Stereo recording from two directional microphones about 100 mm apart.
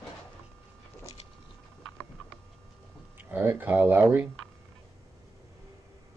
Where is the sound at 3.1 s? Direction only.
20° right (ahead or behind).